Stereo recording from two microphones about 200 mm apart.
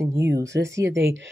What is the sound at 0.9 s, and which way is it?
Speech, 65° right (ahead or behind).